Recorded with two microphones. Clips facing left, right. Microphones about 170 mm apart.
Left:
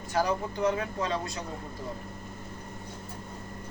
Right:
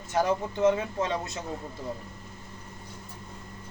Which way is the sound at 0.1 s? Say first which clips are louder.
Right 2 dB; 25° right (ahead or behind).